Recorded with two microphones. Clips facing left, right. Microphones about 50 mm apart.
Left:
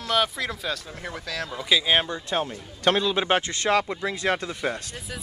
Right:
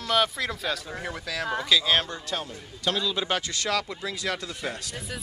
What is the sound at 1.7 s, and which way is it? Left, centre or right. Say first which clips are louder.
Speech: left 3 dB; centre.